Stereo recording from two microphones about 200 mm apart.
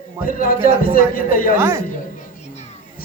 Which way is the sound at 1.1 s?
45° left (ahead or behind).